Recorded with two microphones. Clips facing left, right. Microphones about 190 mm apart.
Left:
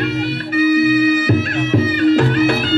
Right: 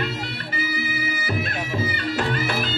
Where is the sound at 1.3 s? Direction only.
70° left (ahead or behind).